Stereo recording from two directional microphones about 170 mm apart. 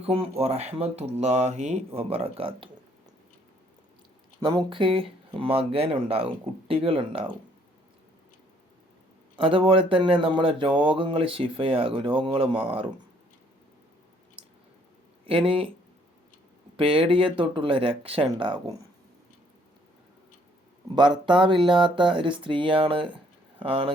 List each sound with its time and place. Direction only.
0.0 s speech: 35° right (ahead or behind)
4.4 s speech: 25° right (ahead or behind)
9.3 s speech: 30° right (ahead or behind)
15.3 s speech: 35° right (ahead or behind)
16.7 s speech: 35° right (ahead or behind)
21.2 s speech: 30° right (ahead or behind)